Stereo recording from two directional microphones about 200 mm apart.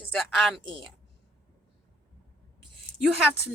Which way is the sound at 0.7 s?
25° right (ahead or behind).